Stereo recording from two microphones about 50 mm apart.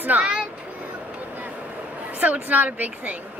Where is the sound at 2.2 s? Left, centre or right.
Right.